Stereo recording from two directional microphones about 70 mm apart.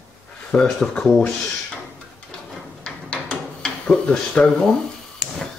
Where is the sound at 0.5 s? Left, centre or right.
Centre.